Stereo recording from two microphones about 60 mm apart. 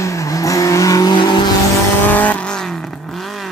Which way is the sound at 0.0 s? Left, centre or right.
Left.